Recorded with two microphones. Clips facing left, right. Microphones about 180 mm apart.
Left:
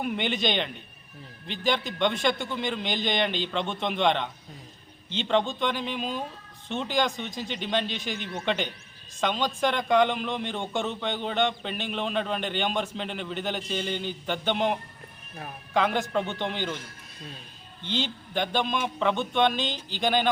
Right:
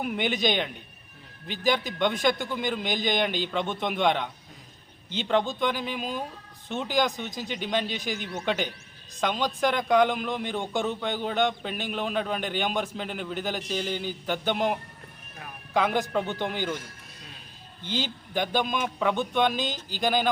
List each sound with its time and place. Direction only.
0.0 s a man's voice: 5° right (ahead or behind)
17.9 s a man's voice: 5° right (ahead or behind)